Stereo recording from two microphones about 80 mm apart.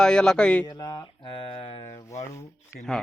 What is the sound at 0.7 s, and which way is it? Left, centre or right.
Speech, left.